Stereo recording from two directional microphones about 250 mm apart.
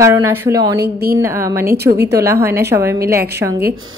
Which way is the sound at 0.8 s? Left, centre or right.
Right.